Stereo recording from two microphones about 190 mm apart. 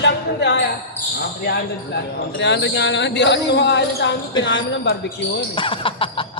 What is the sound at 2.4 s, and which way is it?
Speech, 70° left (ahead or behind).